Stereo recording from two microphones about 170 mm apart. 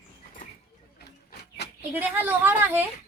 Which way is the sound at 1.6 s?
80° left.